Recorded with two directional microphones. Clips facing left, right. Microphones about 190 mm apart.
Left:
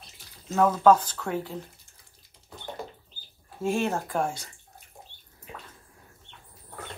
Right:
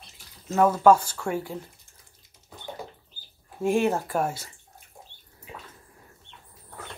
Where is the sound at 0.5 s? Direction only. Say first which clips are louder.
Right 1 dB; 5° right (ahead or behind).